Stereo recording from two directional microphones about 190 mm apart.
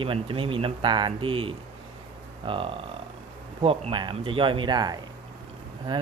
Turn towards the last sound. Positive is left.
turn(degrees=-25)  # may be behind; listen again after turning